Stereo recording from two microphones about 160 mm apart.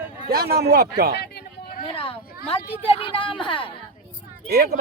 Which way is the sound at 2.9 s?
35° left (ahead or behind).